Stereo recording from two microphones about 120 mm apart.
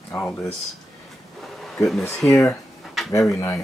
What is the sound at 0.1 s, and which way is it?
Speech, 15° left (ahead or behind).